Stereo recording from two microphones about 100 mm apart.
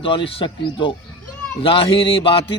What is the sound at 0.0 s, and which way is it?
A man's voice, 60° left (ahead or behind).